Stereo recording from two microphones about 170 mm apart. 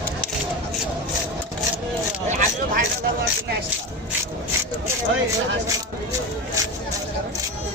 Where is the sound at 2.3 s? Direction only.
45° right (ahead or behind).